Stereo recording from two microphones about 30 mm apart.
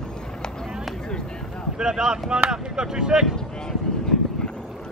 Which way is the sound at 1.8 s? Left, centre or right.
Right.